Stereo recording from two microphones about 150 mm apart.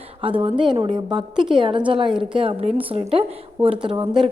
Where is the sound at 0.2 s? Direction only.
35° right (ahead or behind).